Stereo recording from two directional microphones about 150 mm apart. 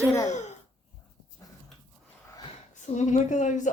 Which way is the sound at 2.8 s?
50° left (ahead or behind).